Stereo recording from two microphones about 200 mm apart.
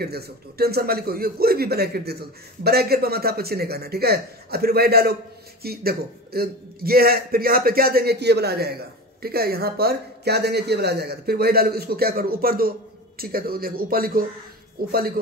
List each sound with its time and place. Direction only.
0.0 s a man's voice: 50° right (ahead or behind)